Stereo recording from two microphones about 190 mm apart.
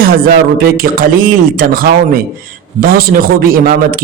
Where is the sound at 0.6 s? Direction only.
50° right (ahead or behind).